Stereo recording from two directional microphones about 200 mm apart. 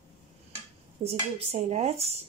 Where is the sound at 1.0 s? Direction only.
30° right (ahead or behind).